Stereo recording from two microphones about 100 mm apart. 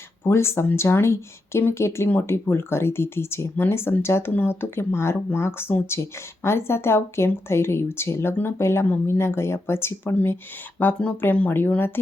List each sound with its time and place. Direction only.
0.3 s speech: 25° left (ahead or behind)